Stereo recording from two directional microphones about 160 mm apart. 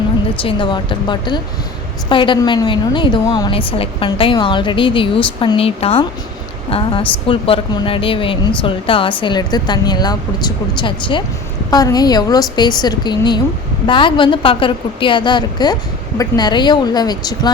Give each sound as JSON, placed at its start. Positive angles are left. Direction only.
{"t": 0.4, "sound": "a woman's voice", "side_deg": 30}